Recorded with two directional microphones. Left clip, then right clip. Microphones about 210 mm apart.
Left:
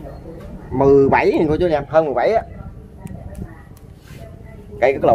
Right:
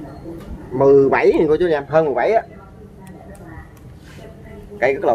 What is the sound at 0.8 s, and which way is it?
A man's voice, 40° left (ahead or behind).